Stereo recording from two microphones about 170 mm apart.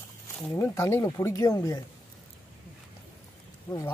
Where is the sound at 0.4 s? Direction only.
15° left (ahead or behind).